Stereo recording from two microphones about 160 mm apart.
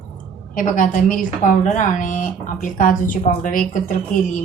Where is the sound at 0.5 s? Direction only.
55° left (ahead or behind).